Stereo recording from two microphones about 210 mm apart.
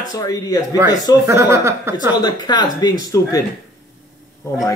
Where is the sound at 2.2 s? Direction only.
20° left (ahead or behind).